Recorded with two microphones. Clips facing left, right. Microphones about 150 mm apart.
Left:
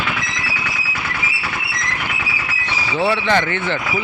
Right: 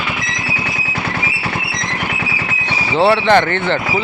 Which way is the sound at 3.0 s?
65° right (ahead or behind).